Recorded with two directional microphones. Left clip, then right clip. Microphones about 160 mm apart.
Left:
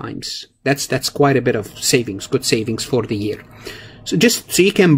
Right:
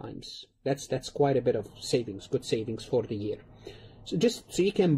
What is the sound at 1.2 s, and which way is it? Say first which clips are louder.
Speech: left 10 dB; 10° left (ahead or behind).